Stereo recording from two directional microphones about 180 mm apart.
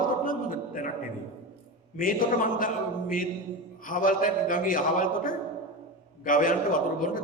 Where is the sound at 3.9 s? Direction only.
50° left (ahead or behind).